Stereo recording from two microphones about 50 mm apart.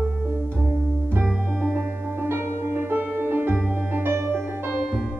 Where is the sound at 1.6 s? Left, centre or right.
Right.